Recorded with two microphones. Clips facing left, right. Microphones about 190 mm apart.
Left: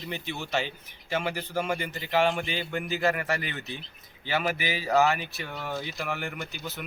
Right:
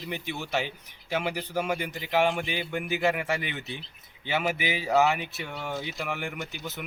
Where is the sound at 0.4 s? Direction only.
10° right (ahead or behind).